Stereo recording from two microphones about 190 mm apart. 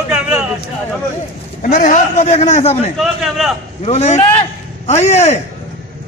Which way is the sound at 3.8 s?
35° left (ahead or behind).